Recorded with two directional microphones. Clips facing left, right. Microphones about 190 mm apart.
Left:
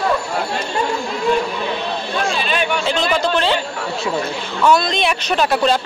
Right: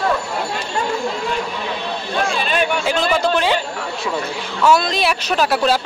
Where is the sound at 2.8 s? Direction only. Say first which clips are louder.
Right 1 dB; 10° right (ahead or behind).